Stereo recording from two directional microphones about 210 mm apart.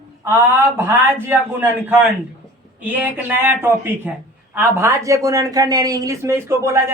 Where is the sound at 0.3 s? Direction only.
10° right (ahead or behind).